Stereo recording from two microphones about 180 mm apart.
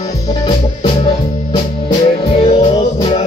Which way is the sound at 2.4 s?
30° left (ahead or behind).